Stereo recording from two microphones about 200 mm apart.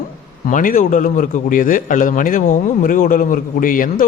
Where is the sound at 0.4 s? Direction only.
45° left (ahead or behind).